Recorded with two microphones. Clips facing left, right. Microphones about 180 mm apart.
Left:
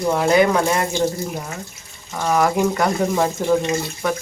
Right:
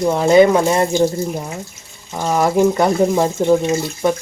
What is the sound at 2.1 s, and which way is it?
Speech, 25° right (ahead or behind).